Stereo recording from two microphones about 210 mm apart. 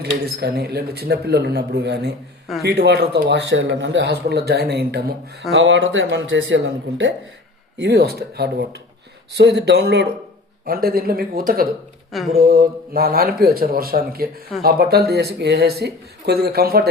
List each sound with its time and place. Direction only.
0.0 s a man's voice: 50° right (ahead or behind)
5.5 s speech: 60° right (ahead or behind)
7.8 s a man's voice: 50° right (ahead or behind)